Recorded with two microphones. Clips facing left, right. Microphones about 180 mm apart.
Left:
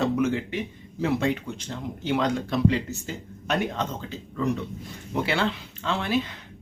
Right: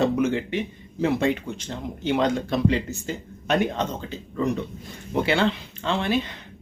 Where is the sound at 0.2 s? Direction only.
Centre (ahead or behind).